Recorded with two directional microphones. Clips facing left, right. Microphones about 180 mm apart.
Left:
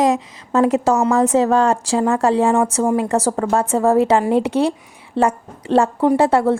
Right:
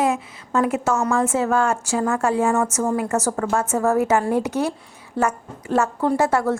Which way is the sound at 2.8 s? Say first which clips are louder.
Left 4 dB; 25° left (ahead or behind).